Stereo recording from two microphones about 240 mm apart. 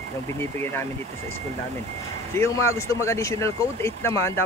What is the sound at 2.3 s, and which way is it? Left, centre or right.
Speech, centre.